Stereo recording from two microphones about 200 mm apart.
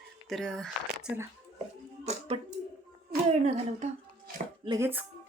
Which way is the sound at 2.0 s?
30° right (ahead or behind).